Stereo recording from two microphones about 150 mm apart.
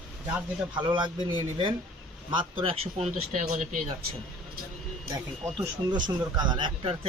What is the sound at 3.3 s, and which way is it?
Speech, 60° right (ahead or behind).